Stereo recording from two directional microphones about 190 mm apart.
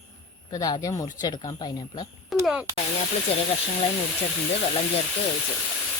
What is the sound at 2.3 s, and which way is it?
Speech, centre (ahead or behind).